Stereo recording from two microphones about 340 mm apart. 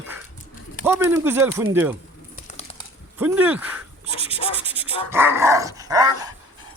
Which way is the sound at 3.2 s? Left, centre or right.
Centre.